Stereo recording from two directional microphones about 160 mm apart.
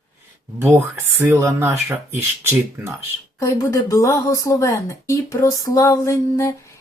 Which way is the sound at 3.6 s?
20° left (ahead or behind).